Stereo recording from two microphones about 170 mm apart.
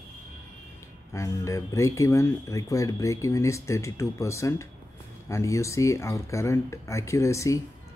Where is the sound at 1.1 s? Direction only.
20° left (ahead or behind).